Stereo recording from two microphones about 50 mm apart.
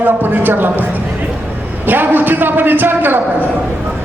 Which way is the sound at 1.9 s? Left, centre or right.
Right.